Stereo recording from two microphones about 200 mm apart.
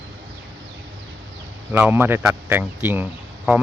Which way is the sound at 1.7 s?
10° right (ahead or behind).